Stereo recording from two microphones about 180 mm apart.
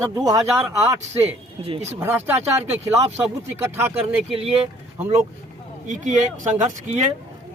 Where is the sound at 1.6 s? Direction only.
35° right (ahead or behind).